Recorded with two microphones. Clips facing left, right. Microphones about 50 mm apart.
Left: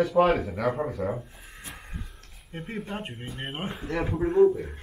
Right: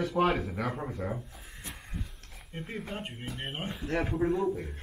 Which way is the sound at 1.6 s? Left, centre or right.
Centre.